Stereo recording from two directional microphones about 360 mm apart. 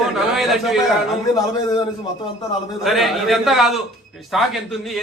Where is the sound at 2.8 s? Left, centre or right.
Centre.